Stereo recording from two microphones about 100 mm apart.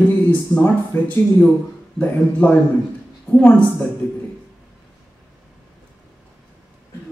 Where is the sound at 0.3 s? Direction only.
15° left (ahead or behind).